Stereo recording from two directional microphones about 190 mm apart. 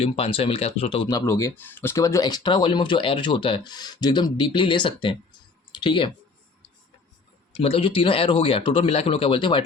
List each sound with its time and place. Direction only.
0.0 s speech: 30° left (ahead or behind)
7.6 s speech: 30° left (ahead or behind)